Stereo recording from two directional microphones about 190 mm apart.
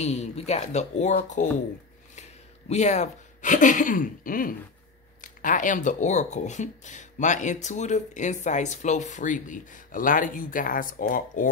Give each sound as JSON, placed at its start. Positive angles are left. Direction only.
{"t": 0.0, "sound": "speech", "side_deg": 35}
{"t": 2.7, "sound": "speech", "side_deg": 35}